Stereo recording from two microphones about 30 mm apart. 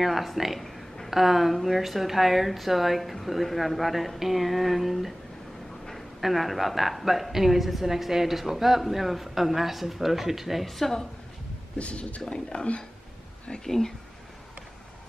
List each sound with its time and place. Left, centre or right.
0.0 s a woman's voice: centre
0.6 s a sound: centre
1.1 s a woman's voice: centre
6.2 s a woman's voice: centre
10.7 s a woman's voice: centre
11.8 s speech: left
12.3 s speech: left
13.7 s a woman's voice: centre